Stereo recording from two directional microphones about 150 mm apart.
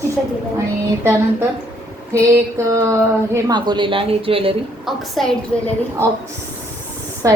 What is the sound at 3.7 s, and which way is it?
Speech, 30° right (ahead or behind).